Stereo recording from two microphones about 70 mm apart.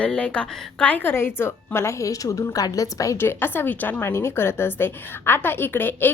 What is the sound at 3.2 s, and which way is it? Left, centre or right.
A woman's voice, left.